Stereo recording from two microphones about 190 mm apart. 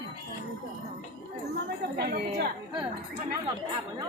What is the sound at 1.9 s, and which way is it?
Speech, 55° right (ahead or behind).